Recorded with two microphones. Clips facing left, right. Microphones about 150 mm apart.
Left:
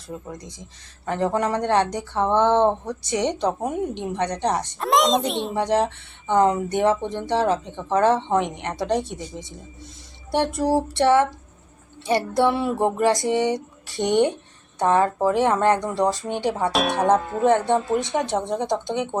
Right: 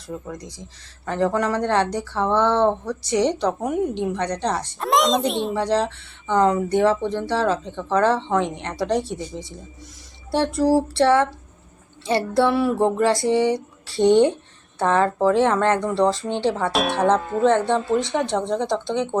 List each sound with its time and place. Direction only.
0.3 s speech: 20° left (ahead or behind)
4.8 s a child's voice: centre (ahead or behind)
5.5 s speech: 20° left (ahead or behind)
16.7 s a child's voice: centre (ahead or behind)
17.4 s speech: 15° left (ahead or behind)